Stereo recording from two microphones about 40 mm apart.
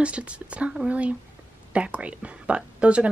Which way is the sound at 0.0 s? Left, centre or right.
Right.